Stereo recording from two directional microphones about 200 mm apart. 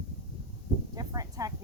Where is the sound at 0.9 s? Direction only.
20° right (ahead or behind).